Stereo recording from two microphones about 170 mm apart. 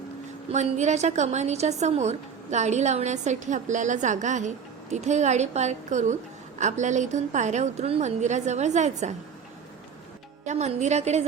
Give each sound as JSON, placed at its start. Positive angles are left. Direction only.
{"t": 0.5, "sound": "a woman's voice", "side_deg": -45}
{"t": 10.4, "sound": "a woman's voice", "side_deg": -45}